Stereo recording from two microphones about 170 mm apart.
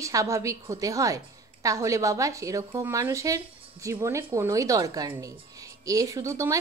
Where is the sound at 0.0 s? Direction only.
20° right (ahead or behind).